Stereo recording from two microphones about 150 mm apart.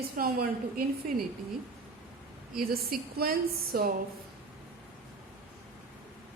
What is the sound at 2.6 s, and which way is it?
A woman's voice, 85° right.